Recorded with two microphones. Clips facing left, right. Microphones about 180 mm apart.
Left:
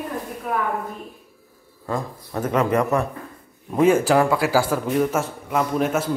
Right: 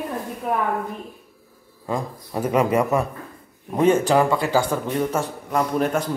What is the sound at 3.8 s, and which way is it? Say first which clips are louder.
A man's voice: left 1 dB; 5° left (ahead or behind).